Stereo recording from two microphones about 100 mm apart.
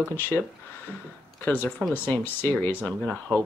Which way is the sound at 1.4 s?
20° left (ahead or behind).